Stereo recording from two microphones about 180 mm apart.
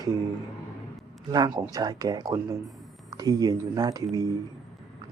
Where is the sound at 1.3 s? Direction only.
20° right (ahead or behind).